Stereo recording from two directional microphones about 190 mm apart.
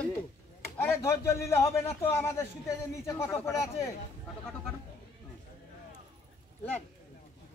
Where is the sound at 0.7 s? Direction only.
15° left (ahead or behind).